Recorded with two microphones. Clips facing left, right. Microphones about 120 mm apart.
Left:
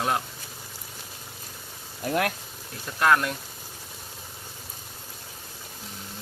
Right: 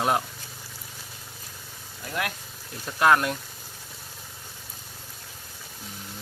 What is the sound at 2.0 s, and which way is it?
Speech, 45° left (ahead or behind).